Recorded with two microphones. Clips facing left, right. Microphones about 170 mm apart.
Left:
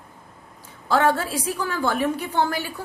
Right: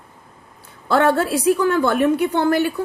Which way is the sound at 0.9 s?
65° right (ahead or behind).